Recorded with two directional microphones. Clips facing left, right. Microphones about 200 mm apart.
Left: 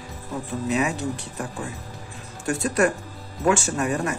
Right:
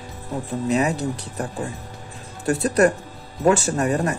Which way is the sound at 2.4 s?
35° right (ahead or behind).